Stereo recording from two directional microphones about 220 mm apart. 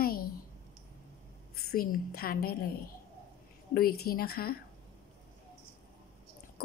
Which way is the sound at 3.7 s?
45° left (ahead or behind).